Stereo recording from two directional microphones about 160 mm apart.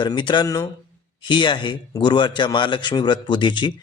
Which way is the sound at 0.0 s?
30° left (ahead or behind).